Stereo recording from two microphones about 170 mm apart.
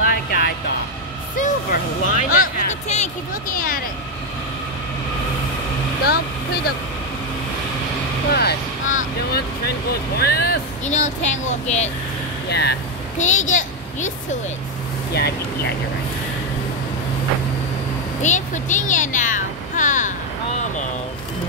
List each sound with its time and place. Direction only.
0.0 s vehicle: 60° left (ahead or behind)
1.4 s a sound: 50° left (ahead or behind)
8.3 s speech: 70° left (ahead or behind)
10.9 s speech: 45° left (ahead or behind)
12.4 s speech: 75° left (ahead or behind)
13.2 s a child's voice: 45° left (ahead or behind)
15.1 s speech: 70° left (ahead or behind)
18.2 s speech: 45° left (ahead or behind)
20.5 s vehicle: 45° left (ahead or behind)